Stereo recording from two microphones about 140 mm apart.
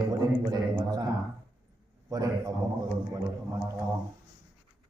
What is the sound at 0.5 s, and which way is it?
Speech, 30° right (ahead or behind).